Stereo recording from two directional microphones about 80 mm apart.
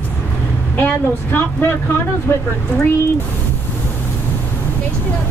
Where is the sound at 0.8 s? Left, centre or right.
Left.